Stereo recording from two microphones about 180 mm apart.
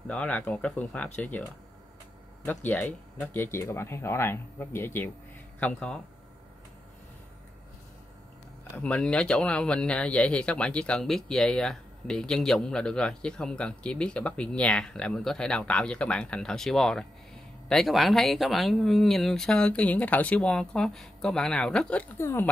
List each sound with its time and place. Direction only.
0.1 s speech: 5° left (ahead or behind)
2.4 s speech: 10° left (ahead or behind)
8.7 s speech: 5° left (ahead or behind)